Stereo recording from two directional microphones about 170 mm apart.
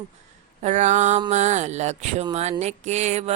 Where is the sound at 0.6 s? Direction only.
45° right (ahead or behind).